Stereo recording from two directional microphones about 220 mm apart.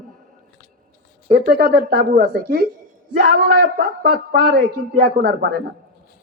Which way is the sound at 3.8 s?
40° right (ahead or behind).